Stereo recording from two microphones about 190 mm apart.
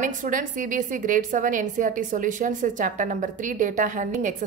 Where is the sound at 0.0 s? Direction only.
45° right (ahead or behind).